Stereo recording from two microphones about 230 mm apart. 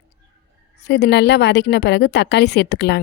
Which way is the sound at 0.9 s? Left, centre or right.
Left.